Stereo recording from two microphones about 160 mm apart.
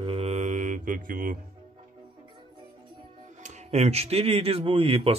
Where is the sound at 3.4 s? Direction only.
40° right (ahead or behind).